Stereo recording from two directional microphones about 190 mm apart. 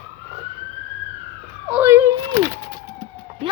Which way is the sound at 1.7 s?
10° right (ahead or behind).